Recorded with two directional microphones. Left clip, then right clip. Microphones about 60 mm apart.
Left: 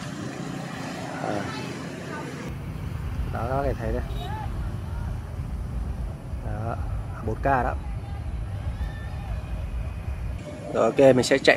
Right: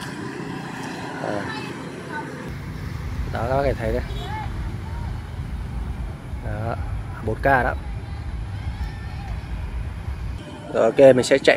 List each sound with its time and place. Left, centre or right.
1.2 s vehicle: centre
3.3 s speech: centre
6.5 s vehicle: centre
7.2 s speech: centre
10.7 s speech: centre